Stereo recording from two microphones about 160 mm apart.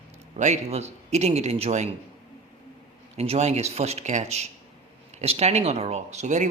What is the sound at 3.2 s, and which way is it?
Speech, 40° right (ahead or behind).